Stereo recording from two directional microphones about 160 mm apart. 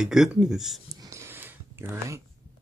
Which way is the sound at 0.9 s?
20° right (ahead or behind).